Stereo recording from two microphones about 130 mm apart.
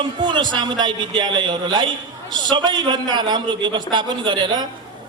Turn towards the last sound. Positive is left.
turn(degrees=-35)  # may be behind; listen again after turning